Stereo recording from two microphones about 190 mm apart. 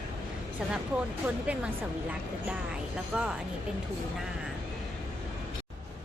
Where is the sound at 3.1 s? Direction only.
5° right (ahead or behind).